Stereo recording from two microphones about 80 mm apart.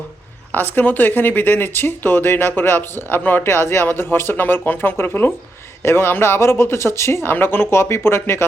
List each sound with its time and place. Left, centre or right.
0.5 s speech: left